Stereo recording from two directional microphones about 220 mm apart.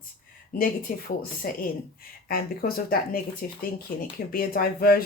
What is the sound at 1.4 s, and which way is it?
Speech, 45° left (ahead or behind).